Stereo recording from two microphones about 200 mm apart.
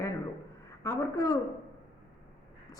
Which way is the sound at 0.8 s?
15° left (ahead or behind).